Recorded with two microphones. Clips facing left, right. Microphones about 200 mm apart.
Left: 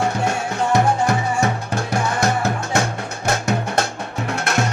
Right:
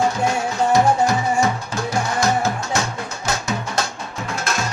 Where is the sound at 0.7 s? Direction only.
60° left (ahead or behind).